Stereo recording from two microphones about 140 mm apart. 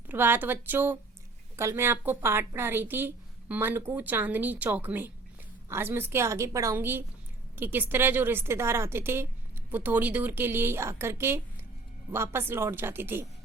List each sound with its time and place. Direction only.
0.1 s a woman's voice: 15° right (ahead or behind)